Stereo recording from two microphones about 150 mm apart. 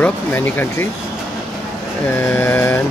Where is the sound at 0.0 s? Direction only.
15° left (ahead or behind).